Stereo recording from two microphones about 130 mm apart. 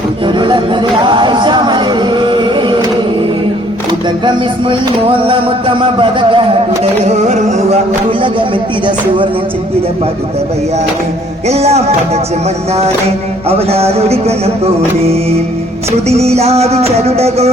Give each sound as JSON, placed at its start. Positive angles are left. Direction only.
{"t": 0.3, "sound": "music", "side_deg": -35}
{"t": 4.3, "sound": "speech", "side_deg": -40}
{"t": 7.0, "sound": "music", "side_deg": -55}
{"t": 11.4, "sound": "music", "side_deg": -55}